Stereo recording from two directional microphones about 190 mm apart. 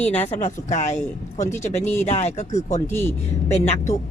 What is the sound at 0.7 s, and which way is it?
Speech, 40° left (ahead or behind).